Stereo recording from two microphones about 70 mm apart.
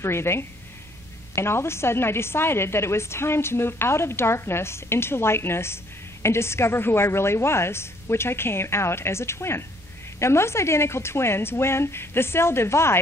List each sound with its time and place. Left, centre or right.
0.0 s a woman's voice: left